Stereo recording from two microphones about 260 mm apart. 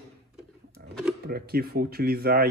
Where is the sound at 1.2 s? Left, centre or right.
Right.